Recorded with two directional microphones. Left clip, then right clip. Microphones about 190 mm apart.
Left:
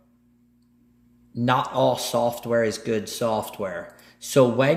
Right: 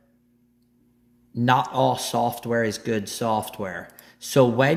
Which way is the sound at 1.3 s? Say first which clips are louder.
Right 2 dB; 30° right (ahead or behind).